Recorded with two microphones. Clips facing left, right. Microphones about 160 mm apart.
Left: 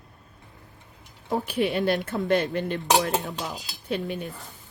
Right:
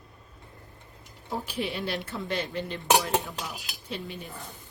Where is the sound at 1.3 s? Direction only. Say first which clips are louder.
Left 7 dB; 55° left (ahead or behind).